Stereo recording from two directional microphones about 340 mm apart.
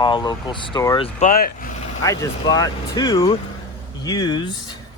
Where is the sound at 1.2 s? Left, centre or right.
Left.